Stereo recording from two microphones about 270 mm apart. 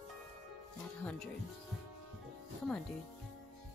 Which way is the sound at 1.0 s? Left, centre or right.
Centre.